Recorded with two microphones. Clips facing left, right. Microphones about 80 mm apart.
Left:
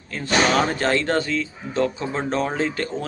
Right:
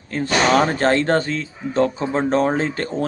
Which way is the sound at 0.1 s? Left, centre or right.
Right.